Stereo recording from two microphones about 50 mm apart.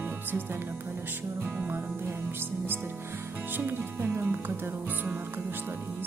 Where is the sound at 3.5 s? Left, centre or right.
Right.